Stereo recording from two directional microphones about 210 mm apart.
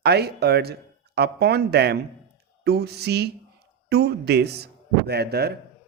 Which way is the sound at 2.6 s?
50° right (ahead or behind).